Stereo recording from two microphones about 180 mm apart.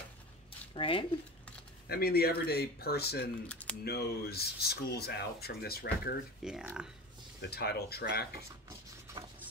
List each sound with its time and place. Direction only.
0.7 s speech: 30° left (ahead or behind)
1.9 s speech: 60° left (ahead or behind)
6.4 s speech: centre (ahead or behind)
7.4 s speech: 65° left (ahead or behind)